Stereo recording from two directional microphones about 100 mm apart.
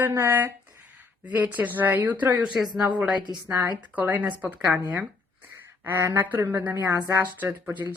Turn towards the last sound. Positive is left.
turn(degrees=-20)  # may be behind; listen again after turning